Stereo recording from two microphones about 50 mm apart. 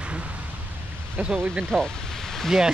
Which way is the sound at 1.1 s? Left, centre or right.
Right.